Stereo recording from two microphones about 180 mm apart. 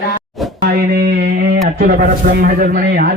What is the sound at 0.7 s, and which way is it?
Speech, 60° right (ahead or behind).